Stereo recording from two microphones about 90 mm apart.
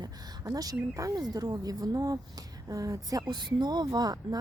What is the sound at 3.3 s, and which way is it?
Speech, 55° right (ahead or behind).